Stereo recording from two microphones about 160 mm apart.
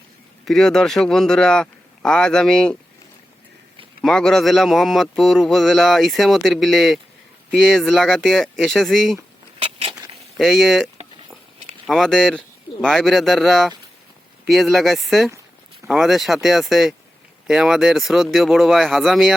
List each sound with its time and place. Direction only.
0.4 s speech: 5° left (ahead or behind)
4.0 s speech: 5° left (ahead or behind)
9.6 s vehicle: 40° right (ahead or behind)
10.3 s speech: centre (ahead or behind)
11.9 s speech: centre (ahead or behind)